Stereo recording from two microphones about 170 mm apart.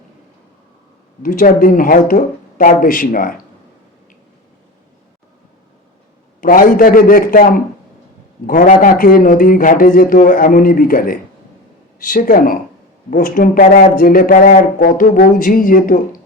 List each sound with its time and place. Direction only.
1.2 s speech: 55° left (ahead or behind)
6.4 s speech: 55° left (ahead or behind)